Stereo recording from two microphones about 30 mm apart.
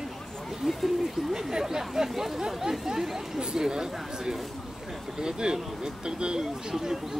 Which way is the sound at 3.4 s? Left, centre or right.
Right.